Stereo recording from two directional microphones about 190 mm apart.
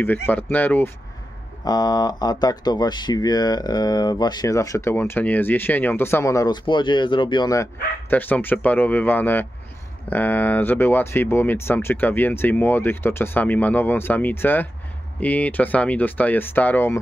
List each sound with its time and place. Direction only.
0.0 s speech: 10° left (ahead or behind)
1.6 s speech: 20° left (ahead or behind)